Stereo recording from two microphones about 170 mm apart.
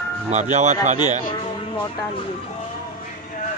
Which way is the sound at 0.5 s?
45° right (ahead or behind).